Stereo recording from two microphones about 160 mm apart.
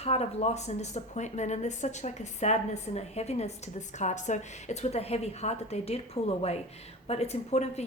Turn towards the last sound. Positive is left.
turn(degrees=45)  # may be behind; listen again after turning